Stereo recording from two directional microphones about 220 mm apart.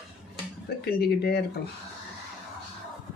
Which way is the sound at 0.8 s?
45° left (ahead or behind).